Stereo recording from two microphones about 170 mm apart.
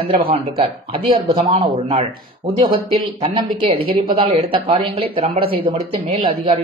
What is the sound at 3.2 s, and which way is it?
Speech, 30° right (ahead or behind).